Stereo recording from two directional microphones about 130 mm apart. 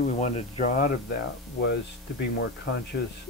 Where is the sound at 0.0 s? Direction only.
70° left (ahead or behind).